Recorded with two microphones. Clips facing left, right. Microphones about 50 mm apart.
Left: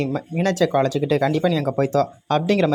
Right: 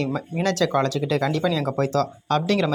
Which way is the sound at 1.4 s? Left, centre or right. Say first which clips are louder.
Left 3 dB; centre.